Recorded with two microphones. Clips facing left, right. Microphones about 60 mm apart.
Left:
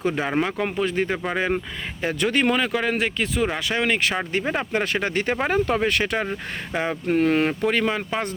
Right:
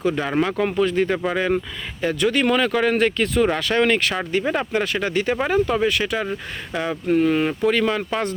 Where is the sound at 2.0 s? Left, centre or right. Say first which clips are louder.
Right 2 dB; left.